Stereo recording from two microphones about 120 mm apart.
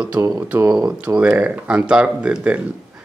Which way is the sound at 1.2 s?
10° right (ahead or behind).